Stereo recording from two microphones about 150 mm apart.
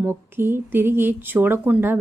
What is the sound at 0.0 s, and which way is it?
A woman's voice, 15° right (ahead or behind).